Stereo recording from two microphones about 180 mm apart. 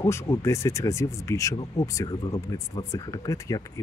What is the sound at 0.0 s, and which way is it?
Speech, 15° left (ahead or behind).